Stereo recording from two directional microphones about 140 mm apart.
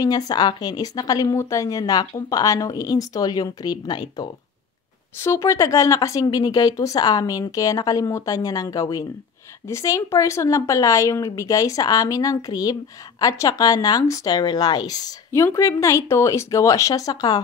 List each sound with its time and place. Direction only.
0.0 s speech: 25° left (ahead or behind)